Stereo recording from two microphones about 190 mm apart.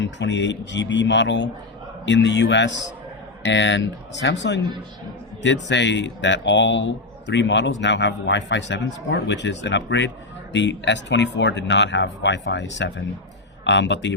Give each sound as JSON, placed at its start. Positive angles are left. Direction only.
{"t": 0.0, "sound": "speech", "side_deg": 70}
{"t": 5.6, "sound": "speech", "side_deg": 70}